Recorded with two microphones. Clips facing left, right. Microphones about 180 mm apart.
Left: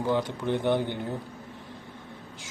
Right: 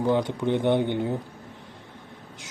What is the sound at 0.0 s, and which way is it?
Speech, 20° right (ahead or behind).